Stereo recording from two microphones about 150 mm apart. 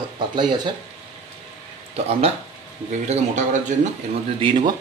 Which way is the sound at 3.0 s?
50° right (ahead or behind).